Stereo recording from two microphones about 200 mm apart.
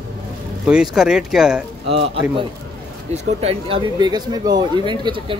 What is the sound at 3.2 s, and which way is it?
Speech, 30° right (ahead or behind).